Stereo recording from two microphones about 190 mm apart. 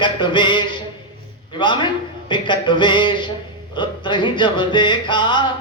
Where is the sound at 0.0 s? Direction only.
25° left (ahead or behind).